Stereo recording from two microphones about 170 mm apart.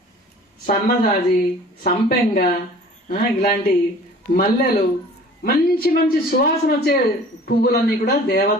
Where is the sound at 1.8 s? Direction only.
50° left (ahead or behind).